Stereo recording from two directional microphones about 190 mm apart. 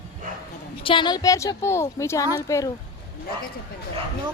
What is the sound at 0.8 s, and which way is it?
A woman's voice, 25° left (ahead or behind).